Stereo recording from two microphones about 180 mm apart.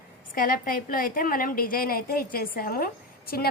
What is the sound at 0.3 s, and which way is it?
A woman's voice, 50° left (ahead or behind).